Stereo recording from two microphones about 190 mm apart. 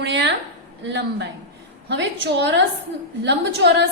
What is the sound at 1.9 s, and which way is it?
A woman's voice, 65° right (ahead or behind).